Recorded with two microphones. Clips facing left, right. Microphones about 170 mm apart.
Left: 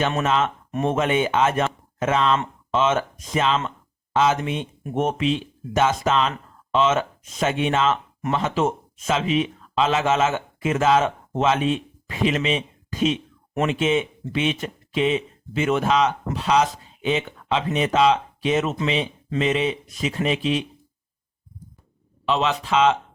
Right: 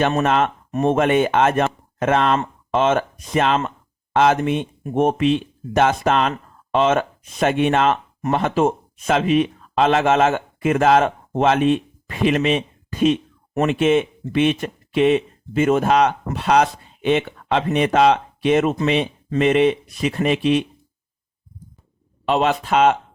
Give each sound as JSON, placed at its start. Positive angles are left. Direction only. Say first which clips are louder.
{"t": 0.3, "sound": "speech", "louder": "right 3 dB", "side_deg": -55}
{"t": 0.7, "sound": "speech", "louder": "right 5 dB", "side_deg": -45}
{"t": 22.3, "sound": "speech", "louder": "right 4 dB", "side_deg": -50}